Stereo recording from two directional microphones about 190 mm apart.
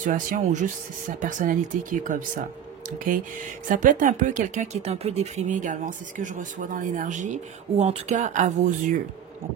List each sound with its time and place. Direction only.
0.0 s speech: 45° right (ahead or behind)
3.6 s speech: 45° right (ahead or behind)